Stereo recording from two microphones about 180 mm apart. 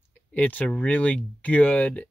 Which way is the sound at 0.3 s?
10° left (ahead or behind).